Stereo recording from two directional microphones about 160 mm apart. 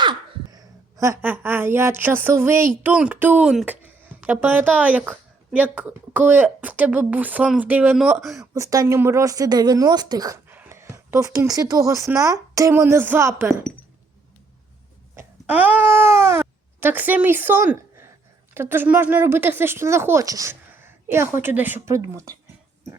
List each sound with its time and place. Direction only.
0.0 s speech: 25° right (ahead or behind); by 8.4 s centre (ahead or behind)
8.5 s speech: 20° right (ahead or behind)
15.1 s speech: 10° right (ahead or behind)